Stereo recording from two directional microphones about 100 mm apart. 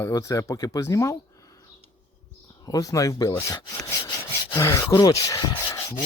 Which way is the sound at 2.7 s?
35° left (ahead or behind).